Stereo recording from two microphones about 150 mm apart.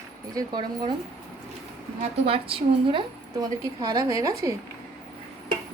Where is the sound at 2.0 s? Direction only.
40° right (ahead or behind).